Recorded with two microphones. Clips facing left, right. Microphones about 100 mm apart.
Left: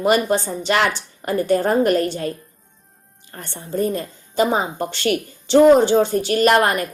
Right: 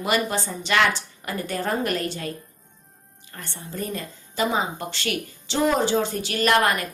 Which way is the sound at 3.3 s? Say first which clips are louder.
Left 9 dB; 35° left (ahead or behind).